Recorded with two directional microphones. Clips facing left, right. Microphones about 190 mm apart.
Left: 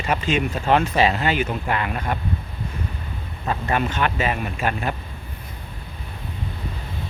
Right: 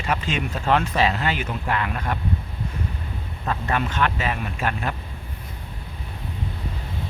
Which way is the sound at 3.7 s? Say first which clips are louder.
Left 2 dB; 5° left (ahead or behind).